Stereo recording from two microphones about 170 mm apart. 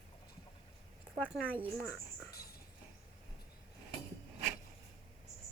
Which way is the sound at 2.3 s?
65° left (ahead or behind).